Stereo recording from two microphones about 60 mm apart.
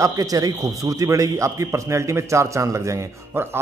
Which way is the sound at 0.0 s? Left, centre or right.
Right.